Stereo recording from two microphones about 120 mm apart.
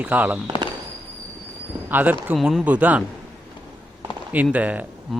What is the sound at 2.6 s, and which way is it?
Speech, 10° right (ahead or behind).